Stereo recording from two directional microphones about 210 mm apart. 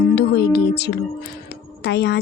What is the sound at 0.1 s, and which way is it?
Music, 50° left (ahead or behind).